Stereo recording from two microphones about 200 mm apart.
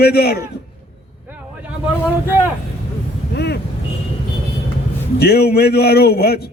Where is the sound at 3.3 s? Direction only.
55° left (ahead or behind).